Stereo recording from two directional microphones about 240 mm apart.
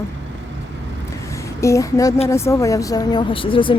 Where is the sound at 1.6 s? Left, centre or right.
Centre.